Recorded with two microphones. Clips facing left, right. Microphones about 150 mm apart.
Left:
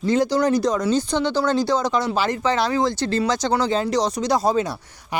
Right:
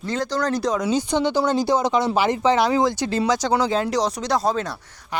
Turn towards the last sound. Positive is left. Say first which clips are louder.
# left 2 dB
turn(degrees=5)  # may be behind; listen again after turning